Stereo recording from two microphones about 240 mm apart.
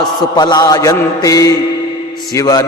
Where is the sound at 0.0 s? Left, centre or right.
Centre.